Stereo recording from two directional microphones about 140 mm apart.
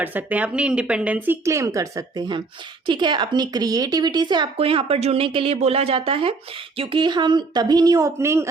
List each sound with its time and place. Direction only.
0.0 s a woman's voice: 10° right (ahead or behind)